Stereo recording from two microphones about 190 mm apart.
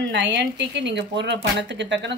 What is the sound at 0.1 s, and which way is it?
Speech, 70° right (ahead or behind).